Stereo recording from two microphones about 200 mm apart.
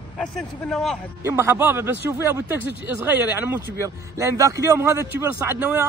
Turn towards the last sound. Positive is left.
turn(degrees=-10)  # may be behind; listen again after turning